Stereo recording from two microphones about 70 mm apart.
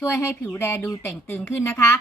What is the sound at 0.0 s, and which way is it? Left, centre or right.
A woman's voice, left.